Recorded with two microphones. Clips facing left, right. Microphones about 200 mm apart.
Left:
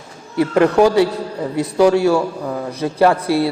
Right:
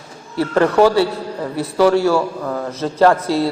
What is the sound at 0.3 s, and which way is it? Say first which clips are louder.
A man's voice: left 1 dB; 15° left (ahead or behind).